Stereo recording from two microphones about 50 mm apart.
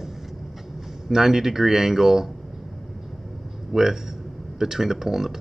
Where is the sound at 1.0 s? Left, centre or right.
Centre.